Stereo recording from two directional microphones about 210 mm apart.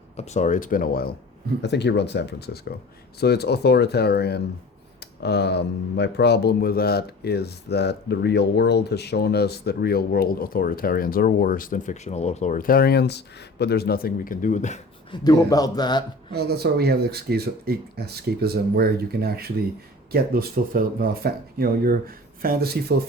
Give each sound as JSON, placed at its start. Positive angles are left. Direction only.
{"t": 0.2, "sound": "speech", "side_deg": 35}
{"t": 15.1, "sound": "a man's voice", "side_deg": 20}
{"t": 16.3, "sound": "speech", "side_deg": -50}